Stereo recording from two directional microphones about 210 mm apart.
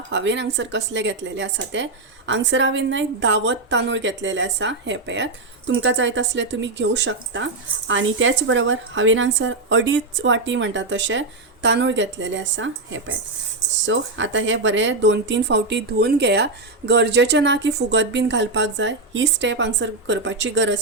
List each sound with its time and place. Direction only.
0.1 s speech: 60° right (ahead or behind)